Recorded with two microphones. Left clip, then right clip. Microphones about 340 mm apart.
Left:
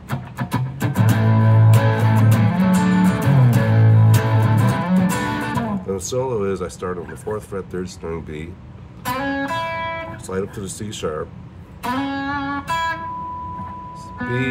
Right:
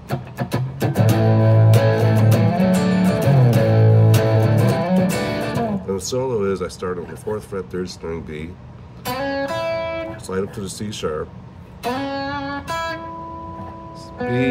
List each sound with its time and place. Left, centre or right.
0.1 s music: centre
5.9 s speech: centre
9.1 s music: centre
10.2 s speech: centre
11.8 s music: left